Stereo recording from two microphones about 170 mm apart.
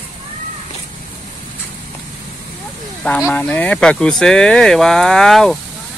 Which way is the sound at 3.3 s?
10° left (ahead or behind).